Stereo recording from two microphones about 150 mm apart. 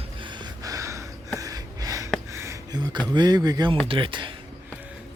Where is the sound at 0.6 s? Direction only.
20° right (ahead or behind).